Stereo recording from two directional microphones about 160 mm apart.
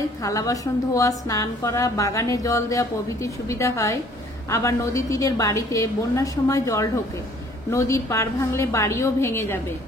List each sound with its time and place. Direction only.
0.2 s a woman's voice: 20° left (ahead or behind)